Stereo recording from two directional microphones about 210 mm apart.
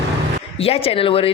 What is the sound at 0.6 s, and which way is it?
Speech, 25° left (ahead or behind).